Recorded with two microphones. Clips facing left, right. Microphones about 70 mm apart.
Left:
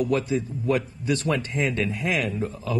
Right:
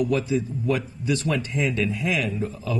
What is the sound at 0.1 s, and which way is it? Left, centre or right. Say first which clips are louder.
Speech: right 1 dB; left.